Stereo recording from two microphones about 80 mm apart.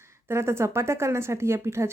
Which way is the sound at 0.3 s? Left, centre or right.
Right.